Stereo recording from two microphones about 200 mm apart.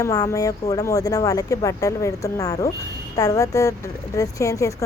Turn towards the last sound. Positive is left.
turn(degrees=15)  # may be behind; listen again after turning